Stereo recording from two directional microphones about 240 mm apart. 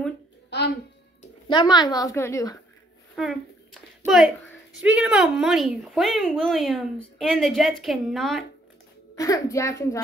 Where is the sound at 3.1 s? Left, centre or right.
Centre.